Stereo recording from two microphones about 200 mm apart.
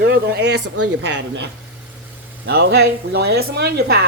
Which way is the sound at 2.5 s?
55° right (ahead or behind).